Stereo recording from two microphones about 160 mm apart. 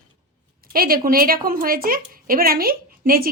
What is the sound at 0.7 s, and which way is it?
A woman's voice, 65° right (ahead or behind).